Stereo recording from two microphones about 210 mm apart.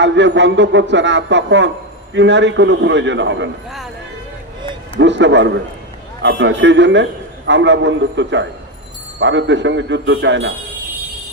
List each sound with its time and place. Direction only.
0.0 s a man's voice: 55° right (ahead or behind)
4.9 s a man's voice: 60° right (ahead or behind)